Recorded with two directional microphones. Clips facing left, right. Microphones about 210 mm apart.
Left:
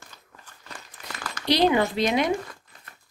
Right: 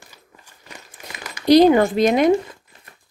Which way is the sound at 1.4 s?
45° right (ahead or behind).